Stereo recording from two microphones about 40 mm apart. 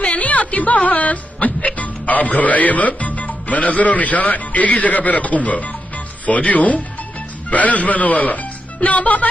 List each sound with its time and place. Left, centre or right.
0.0 s music: left
6.2 s a man's voice: left